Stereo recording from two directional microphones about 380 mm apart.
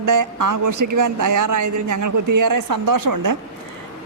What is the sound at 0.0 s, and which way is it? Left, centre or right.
A man's voice, right.